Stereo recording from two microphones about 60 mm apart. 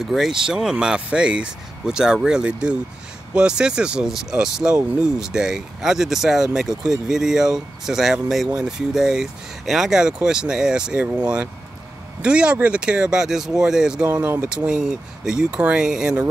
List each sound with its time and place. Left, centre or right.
0.0 s speech: centre